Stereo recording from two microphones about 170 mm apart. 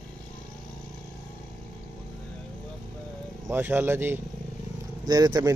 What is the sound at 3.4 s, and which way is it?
Speech, 10° right (ahead or behind).